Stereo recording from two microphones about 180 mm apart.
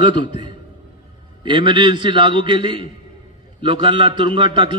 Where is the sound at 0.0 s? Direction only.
25° right (ahead or behind).